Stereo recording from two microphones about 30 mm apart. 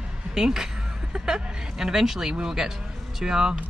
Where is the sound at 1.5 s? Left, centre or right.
Right.